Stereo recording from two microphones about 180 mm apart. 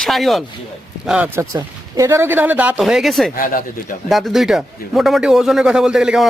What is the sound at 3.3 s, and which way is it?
Speech, 50° left (ahead or behind).